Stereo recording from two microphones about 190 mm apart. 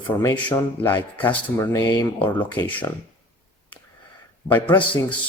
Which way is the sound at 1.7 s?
20° left (ahead or behind).